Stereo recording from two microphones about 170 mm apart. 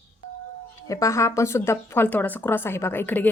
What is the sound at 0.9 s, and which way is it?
Speech, 20° left (ahead or behind).